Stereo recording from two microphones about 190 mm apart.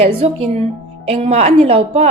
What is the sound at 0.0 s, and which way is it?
A woman's voice, 30° right (ahead or behind).